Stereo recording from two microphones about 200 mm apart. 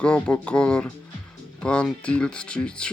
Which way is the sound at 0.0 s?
5° left (ahead or behind).